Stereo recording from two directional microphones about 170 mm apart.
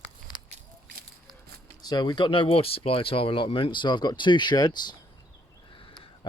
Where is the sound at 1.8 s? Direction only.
25° left (ahead or behind).